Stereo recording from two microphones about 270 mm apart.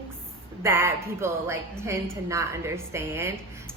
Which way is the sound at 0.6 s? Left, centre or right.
Centre.